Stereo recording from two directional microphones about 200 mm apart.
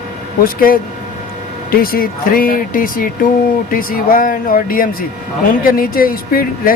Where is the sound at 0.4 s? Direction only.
45° left (ahead or behind).